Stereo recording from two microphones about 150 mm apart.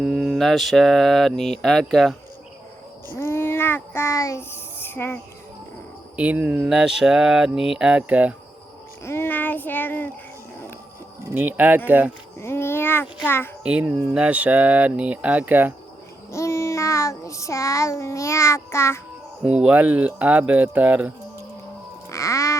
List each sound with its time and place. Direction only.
0.0 s speech: 5° right (ahead or behind)
3.1 s a sound: 15° left (ahead or behind)
6.1 s speech: 10° right (ahead or behind)
9.0 s child singing: 15° left (ahead or behind)
11.3 s speech: 10° right (ahead or behind)
12.4 s babbling: 15° left (ahead or behind)
13.2 s a child's voice: 15° left (ahead or behind)
13.7 s speech: 10° right (ahead or behind)
16.3 s child singing: 20° left (ahead or behind)
19.4 s speech: 5° right (ahead or behind)
22.1 s music: 20° left (ahead or behind)